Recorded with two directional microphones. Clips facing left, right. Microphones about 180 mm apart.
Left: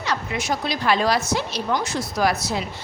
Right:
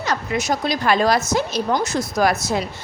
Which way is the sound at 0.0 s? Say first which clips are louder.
Right 3 dB; 45° right (ahead or behind).